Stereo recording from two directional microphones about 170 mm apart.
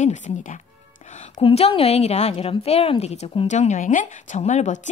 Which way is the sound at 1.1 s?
45° left (ahead or behind).